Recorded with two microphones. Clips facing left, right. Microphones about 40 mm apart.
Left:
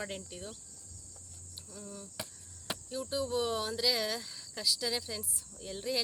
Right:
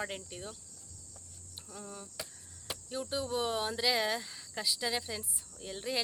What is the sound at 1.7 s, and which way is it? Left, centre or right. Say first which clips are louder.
Speech: even; right.